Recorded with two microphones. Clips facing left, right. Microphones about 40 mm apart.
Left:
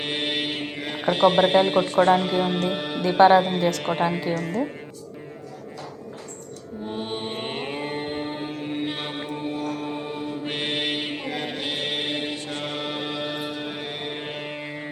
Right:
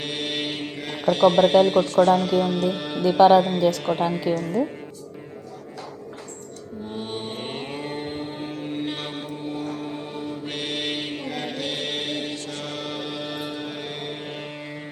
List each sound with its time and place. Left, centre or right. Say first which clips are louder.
0.0 s mantra: left 2 dB; left
0.3 s mantra: left 1 dB; centre
1.5 s music: right 2 dB; left
2.7 s speech: left 1 dB; centre
3.1 s music: right 1 dB; left
3.6 s speech: right 2 dB; left
3.8 s music: even; left
6.8 s mantra: left 2 dB; left
9.2 s music: left 2 dB; left
9.7 s mantra: left 2 dB; left
10.8 s mantra: left 1 dB; centre